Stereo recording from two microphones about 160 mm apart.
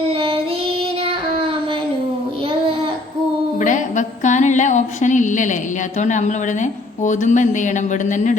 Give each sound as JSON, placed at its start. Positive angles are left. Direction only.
{"t": 0.0, "sound": "child singing", "side_deg": -35}
{"t": 3.6, "sound": "a sound", "side_deg": 50}
{"t": 6.0, "sound": "a woman's voice", "side_deg": 50}